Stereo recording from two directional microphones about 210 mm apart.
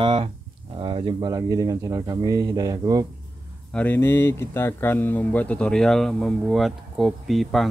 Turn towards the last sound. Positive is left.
turn(degrees=0)  # may be behind; listen again after turning